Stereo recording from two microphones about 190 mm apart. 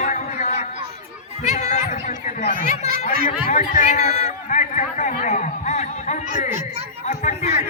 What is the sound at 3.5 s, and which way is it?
A man's voice, 40° left (ahead or behind).